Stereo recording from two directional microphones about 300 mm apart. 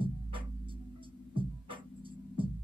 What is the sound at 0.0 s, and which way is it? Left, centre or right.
Music, centre.